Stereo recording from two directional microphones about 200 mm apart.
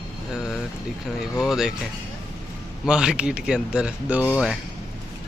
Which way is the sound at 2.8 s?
5° right (ahead or behind).